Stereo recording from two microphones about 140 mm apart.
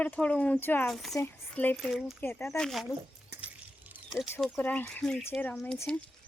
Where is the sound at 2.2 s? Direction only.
15° left (ahead or behind).